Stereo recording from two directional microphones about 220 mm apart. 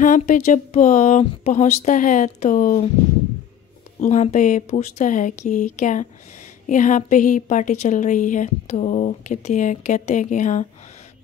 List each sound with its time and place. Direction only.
0.0 s a woman's voice: 35° left (ahead or behind)
4.0 s a woman's voice: 35° left (ahead or behind)